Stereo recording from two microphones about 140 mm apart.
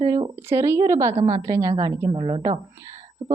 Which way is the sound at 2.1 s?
40° right (ahead or behind).